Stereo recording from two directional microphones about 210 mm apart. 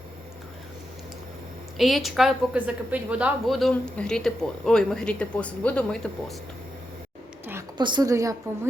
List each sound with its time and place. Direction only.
1.8 s a woman's voice: centre (ahead or behind)
7.8 s a woman's voice: 20° right (ahead or behind)